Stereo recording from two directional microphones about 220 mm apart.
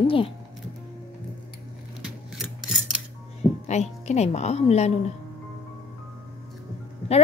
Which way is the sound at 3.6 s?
30° left (ahead or behind).